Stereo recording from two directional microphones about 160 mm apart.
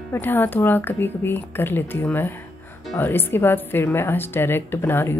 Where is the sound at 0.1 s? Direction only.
10° left (ahead or behind).